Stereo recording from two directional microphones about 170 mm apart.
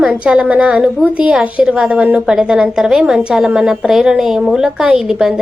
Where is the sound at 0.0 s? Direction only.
5° right (ahead or behind).